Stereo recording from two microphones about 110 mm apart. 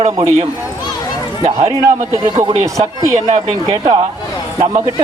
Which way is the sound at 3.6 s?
45° right (ahead or behind).